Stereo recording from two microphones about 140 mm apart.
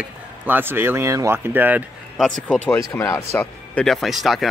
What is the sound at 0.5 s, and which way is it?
Speech, 15° right (ahead or behind).